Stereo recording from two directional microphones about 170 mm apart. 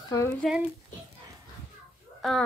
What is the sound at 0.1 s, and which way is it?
Speech, 10° left (ahead or behind).